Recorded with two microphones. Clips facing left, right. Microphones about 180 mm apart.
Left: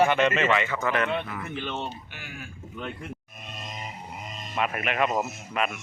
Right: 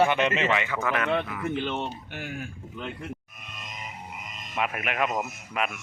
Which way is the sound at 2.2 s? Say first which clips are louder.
Right 7 dB; 50° right (ahead or behind).